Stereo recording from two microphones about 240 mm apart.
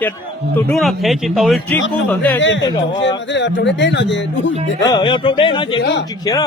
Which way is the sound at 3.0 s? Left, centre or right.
Left.